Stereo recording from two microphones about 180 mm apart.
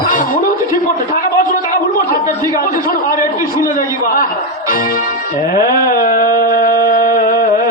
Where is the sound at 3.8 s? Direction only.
50° left (ahead or behind).